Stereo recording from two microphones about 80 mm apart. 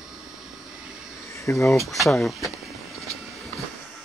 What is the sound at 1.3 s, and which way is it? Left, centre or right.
Cricket, left.